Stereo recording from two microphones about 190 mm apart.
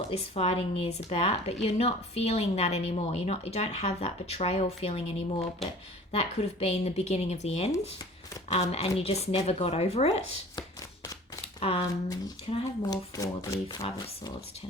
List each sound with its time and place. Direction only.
0.1 s a woman's voice: 30° left (ahead or behind)
7.7 s speech: 15° left (ahead or behind)
8.5 s a woman's voice: 30° left (ahead or behind)
11.8 s speech: 20° left (ahead or behind)